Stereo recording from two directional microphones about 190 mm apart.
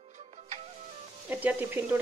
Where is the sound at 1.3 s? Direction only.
10° right (ahead or behind).